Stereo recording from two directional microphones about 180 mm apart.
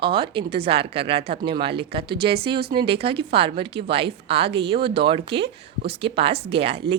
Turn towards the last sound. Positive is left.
turn(degrees=-35)  # may be behind; listen again after turning